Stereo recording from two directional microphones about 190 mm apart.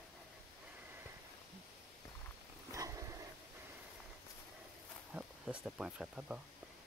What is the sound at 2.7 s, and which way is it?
Dog, 15° right (ahead or behind).